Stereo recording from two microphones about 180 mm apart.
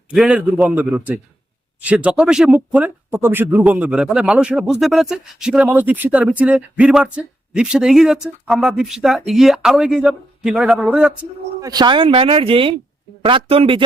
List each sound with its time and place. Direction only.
0.1 s a man's voice: 5° right (ahead or behind)
11.6 s speech: 20° right (ahead or behind)